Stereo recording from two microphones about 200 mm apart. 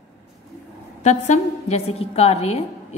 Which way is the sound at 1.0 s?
35° left (ahead or behind).